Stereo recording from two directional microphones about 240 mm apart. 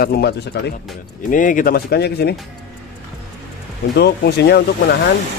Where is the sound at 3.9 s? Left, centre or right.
Left.